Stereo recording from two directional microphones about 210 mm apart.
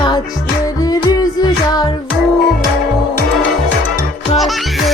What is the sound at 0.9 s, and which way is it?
Music, 20° left (ahead or behind).